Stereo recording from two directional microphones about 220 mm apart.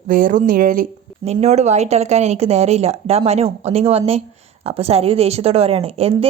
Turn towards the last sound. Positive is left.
turn(degrees=-25)  # may be behind; listen again after turning